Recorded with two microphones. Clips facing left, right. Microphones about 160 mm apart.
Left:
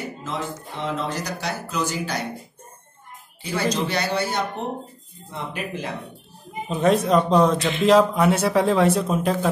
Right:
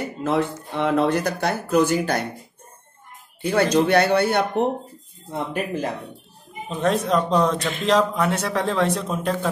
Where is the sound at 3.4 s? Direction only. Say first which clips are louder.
Right 6 dB; 55° right (ahead or behind).